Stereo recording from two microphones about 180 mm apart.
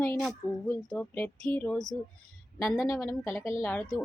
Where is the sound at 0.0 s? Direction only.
5° left (ahead or behind).